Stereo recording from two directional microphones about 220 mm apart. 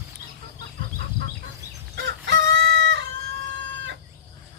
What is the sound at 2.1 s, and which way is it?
Chicken, 50° right (ahead or behind).